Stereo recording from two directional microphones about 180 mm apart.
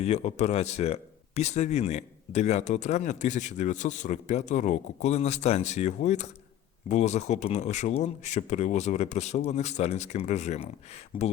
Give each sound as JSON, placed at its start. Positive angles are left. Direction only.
{"t": 0.0, "sound": "speech", "side_deg": 35}
{"t": 11.1, "sound": "speech", "side_deg": 30}